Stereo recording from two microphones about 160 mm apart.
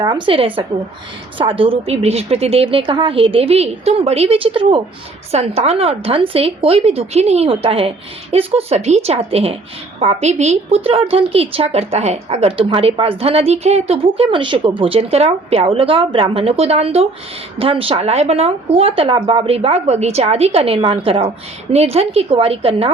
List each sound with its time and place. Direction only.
0.0 s a woman's voice: 30° right (ahead or behind)